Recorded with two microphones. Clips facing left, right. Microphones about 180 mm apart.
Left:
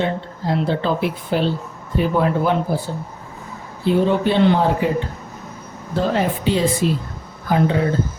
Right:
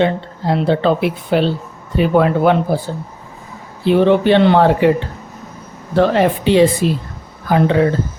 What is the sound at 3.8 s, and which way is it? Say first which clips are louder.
Speech: right 5 dB; 70° right (ahead or behind).